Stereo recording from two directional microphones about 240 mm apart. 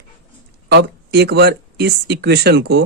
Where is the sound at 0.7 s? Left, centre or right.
Right.